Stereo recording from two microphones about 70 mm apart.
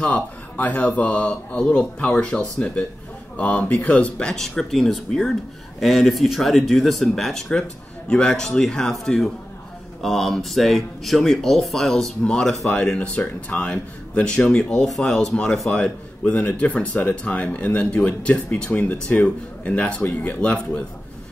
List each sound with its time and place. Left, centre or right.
0.0 s speech: left
15.7 s speech: left